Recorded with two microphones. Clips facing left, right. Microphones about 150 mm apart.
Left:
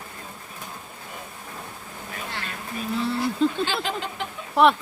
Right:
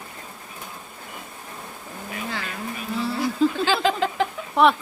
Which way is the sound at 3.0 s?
Centre (ahead or behind).